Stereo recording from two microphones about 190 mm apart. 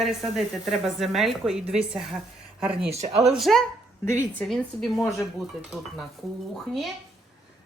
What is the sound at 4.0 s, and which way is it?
Speech, 10° left (ahead or behind).